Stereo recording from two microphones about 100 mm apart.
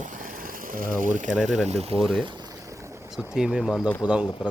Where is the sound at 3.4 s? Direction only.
5° right (ahead or behind).